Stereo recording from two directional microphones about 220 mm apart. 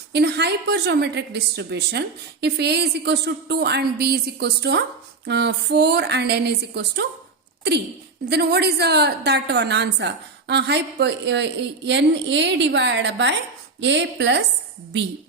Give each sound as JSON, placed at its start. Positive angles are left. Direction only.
{"t": 0.1, "sound": "a woman's voice", "side_deg": -50}
{"t": 8.3, "sound": "a woman's voice", "side_deg": -50}